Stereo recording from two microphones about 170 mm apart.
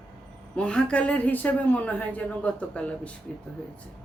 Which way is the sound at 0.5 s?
5° left (ahead or behind).